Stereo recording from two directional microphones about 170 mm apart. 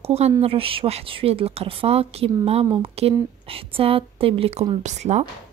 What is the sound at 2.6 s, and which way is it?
Speech, 25° right (ahead or behind).